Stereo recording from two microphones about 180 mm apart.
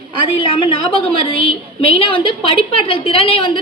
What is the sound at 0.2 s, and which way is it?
A woman's voice, 30° left (ahead or behind).